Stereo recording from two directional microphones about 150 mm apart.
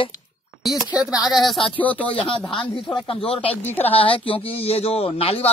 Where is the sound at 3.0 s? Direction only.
40° left (ahead or behind).